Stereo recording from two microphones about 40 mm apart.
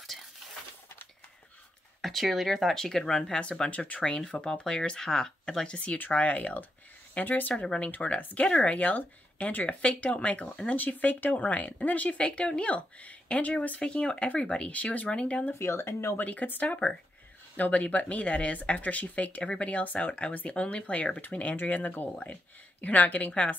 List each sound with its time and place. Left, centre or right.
0.0 s a sound: centre
2.0 s speech: centre; by 3.7 s left
3.7 s speech: left
4.0 s speech: left
5.9 s speech: left
8.7 s speech: left
10.8 s speech: left
15.6 s speech: left
16.2 s speech: left